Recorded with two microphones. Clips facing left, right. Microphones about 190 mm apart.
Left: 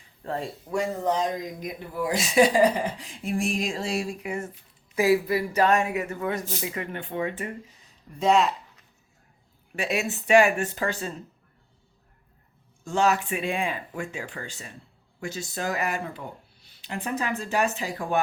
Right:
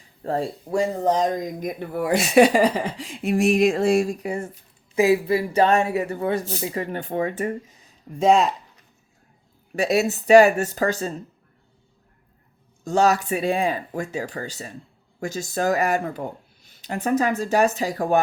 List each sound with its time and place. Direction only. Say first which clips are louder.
0.3 s speech: right 6 dB; 35° right (ahead or behind)
4.9 s speech: right 3 dB; 25° right (ahead or behind); by 8.4 s 45° right (ahead or behind)
9.7 s speech: right 7 dB; 40° right (ahead or behind)
12.8 s speech: right 4 dB; 40° right (ahead or behind)